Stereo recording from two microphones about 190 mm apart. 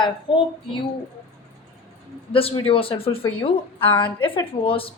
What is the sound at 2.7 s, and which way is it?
Speech, 30° left (ahead or behind).